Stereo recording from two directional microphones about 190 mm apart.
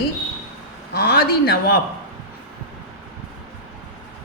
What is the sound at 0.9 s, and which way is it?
Speech, 55° left (ahead or behind).